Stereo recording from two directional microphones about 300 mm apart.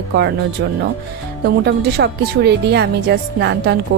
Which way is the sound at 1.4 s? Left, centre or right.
Right.